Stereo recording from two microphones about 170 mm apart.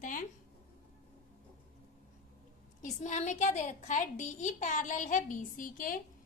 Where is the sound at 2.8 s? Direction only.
45° left (ahead or behind).